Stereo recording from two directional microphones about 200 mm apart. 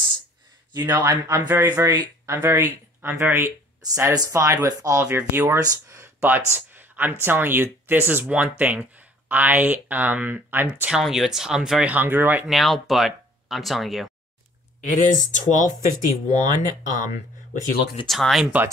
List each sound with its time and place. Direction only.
0.7 s speech: 20° right (ahead or behind); by 14.1 s centre (ahead or behind)
14.8 s speech: 40° left (ahead or behind)
18.0 s speech: centre (ahead or behind)